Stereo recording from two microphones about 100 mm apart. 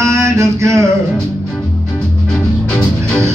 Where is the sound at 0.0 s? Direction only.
30° right (ahead or behind).